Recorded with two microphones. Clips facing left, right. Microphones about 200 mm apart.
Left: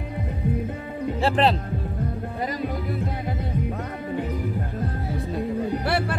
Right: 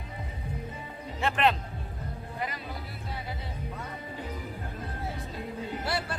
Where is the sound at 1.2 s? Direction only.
35° left (ahead or behind).